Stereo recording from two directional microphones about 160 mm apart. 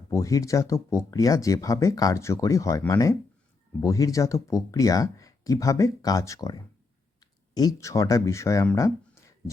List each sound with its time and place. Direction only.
0.1 s speech: 20° left (ahead or behind)